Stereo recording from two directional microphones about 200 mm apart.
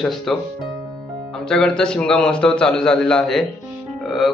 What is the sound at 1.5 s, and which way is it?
Speech, 5° left (ahead or behind).